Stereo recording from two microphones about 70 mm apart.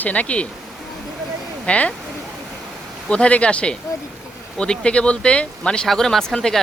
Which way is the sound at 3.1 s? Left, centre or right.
Centre.